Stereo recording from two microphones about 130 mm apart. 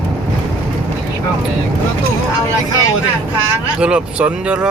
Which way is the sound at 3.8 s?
10° right (ahead or behind).